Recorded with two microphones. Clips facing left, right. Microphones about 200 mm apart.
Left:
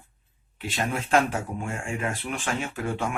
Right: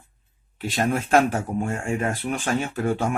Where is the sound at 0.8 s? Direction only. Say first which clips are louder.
Right 4 dB; 45° right (ahead or behind).